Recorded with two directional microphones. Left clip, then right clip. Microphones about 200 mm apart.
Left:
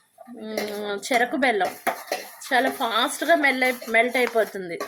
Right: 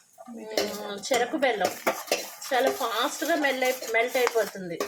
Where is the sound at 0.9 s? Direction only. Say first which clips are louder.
Left 5 dB; 55° left (ahead or behind).